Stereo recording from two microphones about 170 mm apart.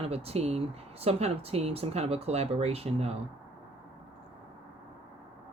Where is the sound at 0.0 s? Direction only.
35° right (ahead or behind).